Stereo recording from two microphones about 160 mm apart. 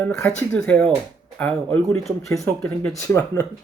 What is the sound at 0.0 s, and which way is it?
Speech, 15° left (ahead or behind).